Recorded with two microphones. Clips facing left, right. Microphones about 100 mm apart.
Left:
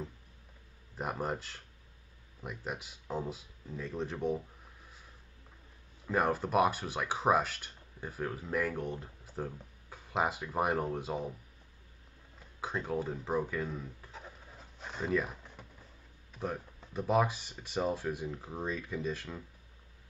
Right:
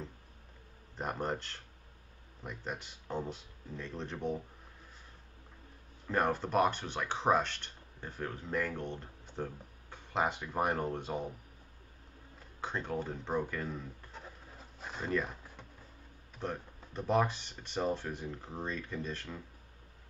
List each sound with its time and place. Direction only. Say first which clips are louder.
0.9 s speech: even; 5° left (ahead or behind)
6.0 s speech: left 1 dB; 5° left (ahead or behind)
12.5 s a sound: left 2 dB; 5° left (ahead or behind)
16.3 s speech: left 1 dB; 5° left (ahead or behind)